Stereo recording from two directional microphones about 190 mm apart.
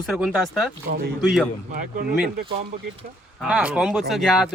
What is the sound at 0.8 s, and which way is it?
Speech, 55° right (ahead or behind).